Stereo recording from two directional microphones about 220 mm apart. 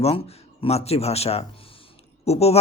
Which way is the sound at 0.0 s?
25° left (ahead or behind).